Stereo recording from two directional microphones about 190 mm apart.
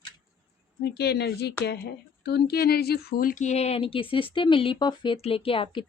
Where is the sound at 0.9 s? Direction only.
60° left (ahead or behind).